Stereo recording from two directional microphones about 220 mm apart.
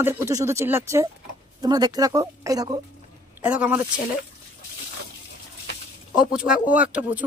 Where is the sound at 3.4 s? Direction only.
5° right (ahead or behind).